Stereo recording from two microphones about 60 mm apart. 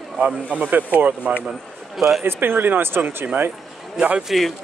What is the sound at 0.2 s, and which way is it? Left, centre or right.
Speech, right.